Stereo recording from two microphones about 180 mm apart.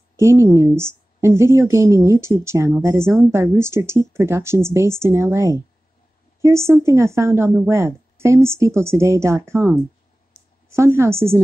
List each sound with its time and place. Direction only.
0.1 s a woman's voice: 15° right (ahead or behind)